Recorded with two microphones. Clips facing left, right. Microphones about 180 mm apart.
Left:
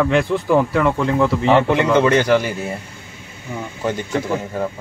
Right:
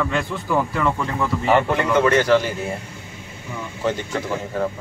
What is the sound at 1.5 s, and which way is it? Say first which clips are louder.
Speech: left 3 dB; 20° left (ahead or behind).